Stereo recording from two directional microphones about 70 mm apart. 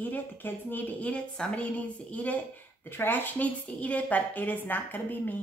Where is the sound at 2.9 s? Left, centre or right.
Left.